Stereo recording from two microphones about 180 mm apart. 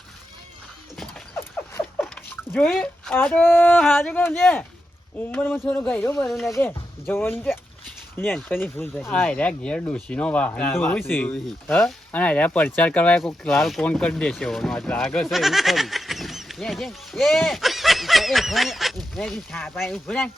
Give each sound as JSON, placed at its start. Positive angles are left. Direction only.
{"t": 0.9, "sound": "dog", "side_deg": 5}
{"t": 1.8, "sound": "patter", "side_deg": 0}
{"t": 2.3, "sound": "a sound", "side_deg": 10}
{"t": 2.7, "sound": "speech", "side_deg": 5}
{"t": 6.2, "sound": "speech", "side_deg": 0}
{"t": 6.5, "sound": "speech", "side_deg": 10}